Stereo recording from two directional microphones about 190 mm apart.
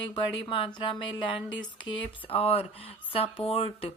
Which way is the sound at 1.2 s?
25° left (ahead or behind).